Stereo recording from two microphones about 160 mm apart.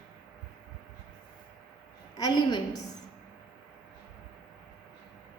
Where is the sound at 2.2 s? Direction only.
25° left (ahead or behind).